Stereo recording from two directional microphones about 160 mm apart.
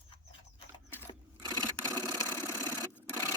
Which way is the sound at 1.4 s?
25° right (ahead or behind).